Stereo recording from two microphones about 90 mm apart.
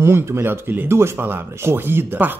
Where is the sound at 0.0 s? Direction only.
30° right (ahead or behind).